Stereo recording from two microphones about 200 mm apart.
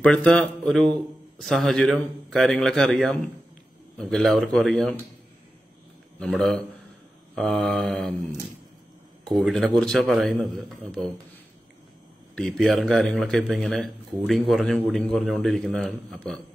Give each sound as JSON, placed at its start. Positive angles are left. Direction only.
{"t": 0.0, "sound": "a man's voice", "side_deg": 5}
{"t": 6.1, "sound": "a man's voice", "side_deg": 0}
{"t": 9.2, "sound": "a man's voice", "side_deg": 0}
{"t": 12.4, "sound": "a man's voice", "side_deg": 0}